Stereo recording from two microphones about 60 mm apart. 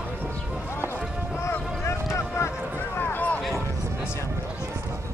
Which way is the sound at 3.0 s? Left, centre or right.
Left.